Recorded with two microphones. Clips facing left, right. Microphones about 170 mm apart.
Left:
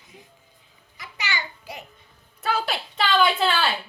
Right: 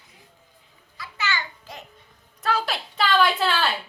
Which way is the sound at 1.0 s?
15° left (ahead or behind).